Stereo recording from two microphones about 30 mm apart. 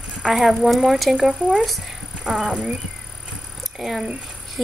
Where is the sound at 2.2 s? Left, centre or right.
Right.